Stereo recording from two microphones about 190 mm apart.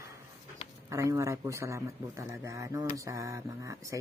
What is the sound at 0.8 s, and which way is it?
Speech, 15° right (ahead or behind).